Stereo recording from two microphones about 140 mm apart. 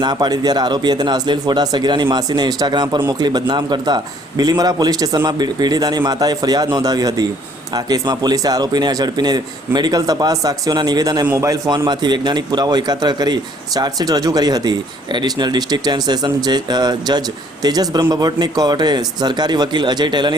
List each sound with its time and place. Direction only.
0.0 s a man's voice: 30° right (ahead or behind)